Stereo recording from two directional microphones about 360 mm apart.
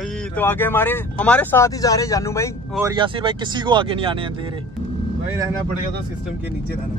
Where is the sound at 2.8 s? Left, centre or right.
Centre.